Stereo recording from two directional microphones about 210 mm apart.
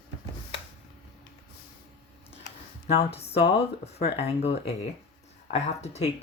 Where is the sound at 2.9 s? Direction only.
30° left (ahead or behind).